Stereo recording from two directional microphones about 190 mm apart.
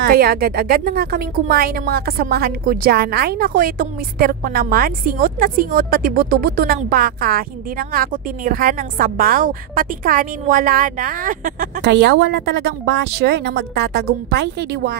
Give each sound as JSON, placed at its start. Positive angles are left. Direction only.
{"t": 0.0, "sound": "a woman's voice", "side_deg": -50}
{"t": 11.8, "sound": "a woman's voice", "side_deg": -65}